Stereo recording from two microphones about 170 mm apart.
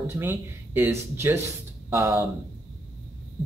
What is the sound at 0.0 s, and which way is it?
Speech, 15° right (ahead or behind).